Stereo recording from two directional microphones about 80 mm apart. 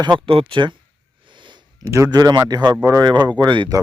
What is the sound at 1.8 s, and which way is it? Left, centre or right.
Speech, right.